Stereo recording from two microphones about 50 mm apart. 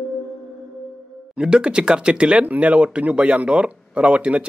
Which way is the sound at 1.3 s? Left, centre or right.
Centre.